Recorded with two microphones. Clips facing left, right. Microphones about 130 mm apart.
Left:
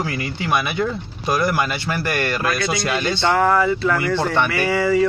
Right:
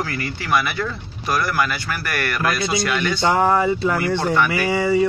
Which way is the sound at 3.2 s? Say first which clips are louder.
Even; 25° right (ahead or behind).